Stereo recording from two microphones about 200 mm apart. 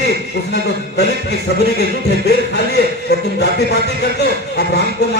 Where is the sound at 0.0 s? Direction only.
55° left (ahead or behind).